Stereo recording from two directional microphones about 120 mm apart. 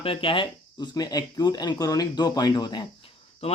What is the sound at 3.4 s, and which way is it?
Speech, 60° left (ahead or behind).